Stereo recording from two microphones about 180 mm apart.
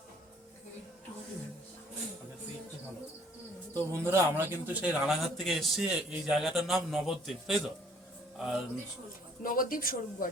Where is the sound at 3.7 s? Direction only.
15° right (ahead or behind).